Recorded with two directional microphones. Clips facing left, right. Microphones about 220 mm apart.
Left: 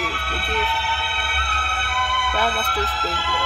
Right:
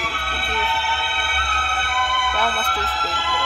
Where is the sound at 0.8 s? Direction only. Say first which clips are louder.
Right 1 dB; 45° right (ahead or behind).